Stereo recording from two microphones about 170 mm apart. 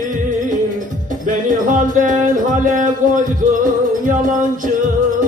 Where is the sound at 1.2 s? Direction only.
50° right (ahead or behind).